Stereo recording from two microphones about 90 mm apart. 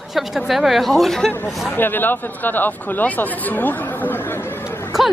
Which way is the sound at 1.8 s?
20° left (ahead or behind).